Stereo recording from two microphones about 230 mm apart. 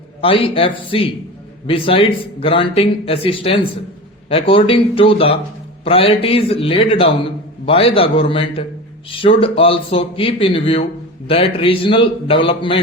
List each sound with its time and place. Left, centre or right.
0.2 s a man's voice: left